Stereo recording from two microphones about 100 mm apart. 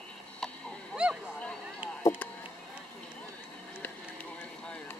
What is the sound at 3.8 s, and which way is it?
Vehicle, 15° left (ahead or behind).